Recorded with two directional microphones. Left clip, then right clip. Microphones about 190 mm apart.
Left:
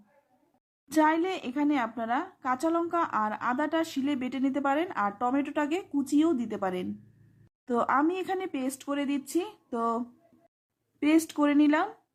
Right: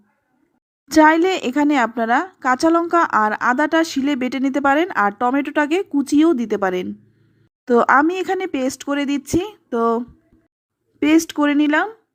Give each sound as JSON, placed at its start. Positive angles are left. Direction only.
{"t": 0.9, "sound": "a woman's voice", "side_deg": -30}
{"t": 11.0, "sound": "speech", "side_deg": -25}